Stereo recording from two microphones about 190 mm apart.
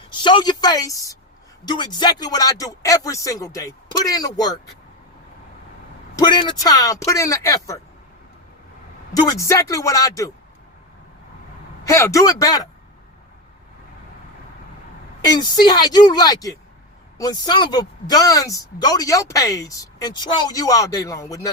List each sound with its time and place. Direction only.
0.2 s speech: 25° left (ahead or behind)
6.1 s speech: 20° left (ahead or behind)
9.4 s speech: 15° left (ahead or behind)
11.9 s speech: 15° left (ahead or behind)
15.4 s speech: 20° left (ahead or behind)